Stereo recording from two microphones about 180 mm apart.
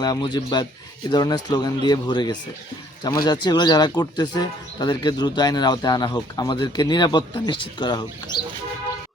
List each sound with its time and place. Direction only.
0.0 s speech: 25° left (ahead or behind)